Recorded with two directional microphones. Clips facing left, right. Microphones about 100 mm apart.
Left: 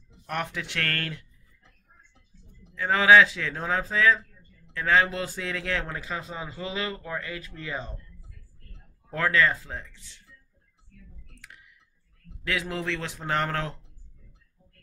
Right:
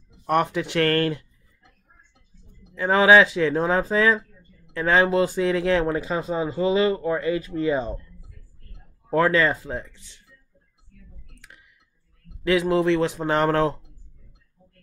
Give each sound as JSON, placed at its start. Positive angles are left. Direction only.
{"t": 0.3, "sound": "speech", "side_deg": -20}
{"t": 2.7, "sound": "speech", "side_deg": -25}
{"t": 9.1, "sound": "speech", "side_deg": -25}
{"t": 12.4, "sound": "speech", "side_deg": -20}